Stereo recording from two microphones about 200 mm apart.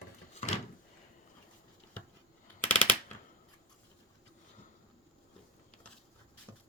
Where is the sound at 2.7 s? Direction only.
10° left (ahead or behind).